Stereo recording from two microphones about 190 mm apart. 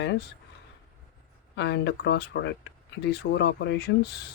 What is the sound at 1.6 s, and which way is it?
Speech, 65° left (ahead or behind).